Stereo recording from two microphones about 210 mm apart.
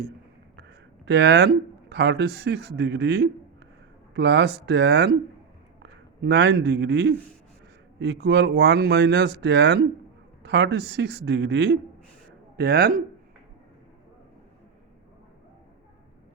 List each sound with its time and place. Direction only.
1.0 s a man's voice: 55° right (ahead or behind)